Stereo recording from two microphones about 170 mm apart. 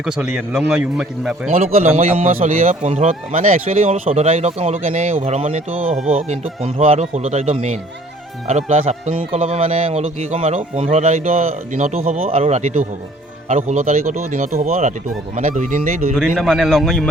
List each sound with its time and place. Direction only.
0.5 s a man's voice: 5° right (ahead or behind)
1.5 s a man's voice: 35° right (ahead or behind)
2.2 s a man's voice: 50° right (ahead or behind)
5.7 s speech: 10° right (ahead or behind)
6.1 s a man's voice: 40° right (ahead or behind)
16.1 s a man's voice: centre (ahead or behind)